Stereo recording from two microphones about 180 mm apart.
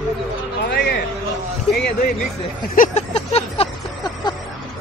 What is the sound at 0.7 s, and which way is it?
Speech, 60° left (ahead or behind).